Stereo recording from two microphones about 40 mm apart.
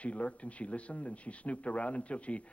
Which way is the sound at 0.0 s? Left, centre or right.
Left.